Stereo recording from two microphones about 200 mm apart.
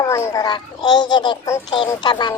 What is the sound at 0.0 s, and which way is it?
A child's voice, 15° left (ahead or behind).